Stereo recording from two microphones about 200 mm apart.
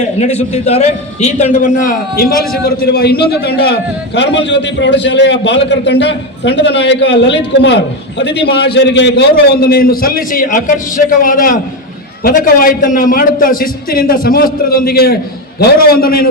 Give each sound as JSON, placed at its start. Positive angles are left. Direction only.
{"t": 0.2, "sound": "a man's voice", "side_deg": 35}